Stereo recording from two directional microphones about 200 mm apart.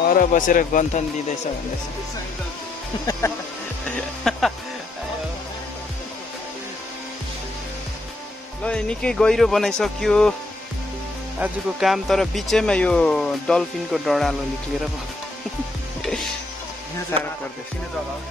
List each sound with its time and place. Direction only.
0.0 s speech: 45° left (ahead or behind)
3.1 s speech: 15° left (ahead or behind)
4.2 s music: centre (ahead or behind)
8.6 s speech: 5° left (ahead or behind)
11.3 s speech: 5° right (ahead or behind)
16.0 s music: centre (ahead or behind)